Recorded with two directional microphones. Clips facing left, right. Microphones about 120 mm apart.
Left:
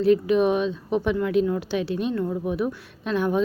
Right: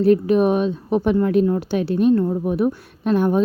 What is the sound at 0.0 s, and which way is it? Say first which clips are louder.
A woman's voice: right 3 dB; 45° right (ahead or behind).